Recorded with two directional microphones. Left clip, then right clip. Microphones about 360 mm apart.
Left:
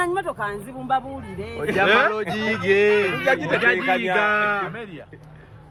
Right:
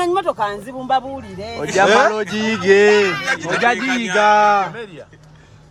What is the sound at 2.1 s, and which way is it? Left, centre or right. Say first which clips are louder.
Speech: right 4 dB; right.